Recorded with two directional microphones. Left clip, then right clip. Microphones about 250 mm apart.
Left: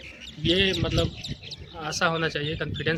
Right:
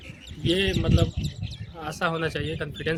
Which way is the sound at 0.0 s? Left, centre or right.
Centre.